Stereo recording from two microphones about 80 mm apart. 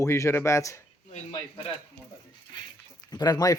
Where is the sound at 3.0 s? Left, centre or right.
Left.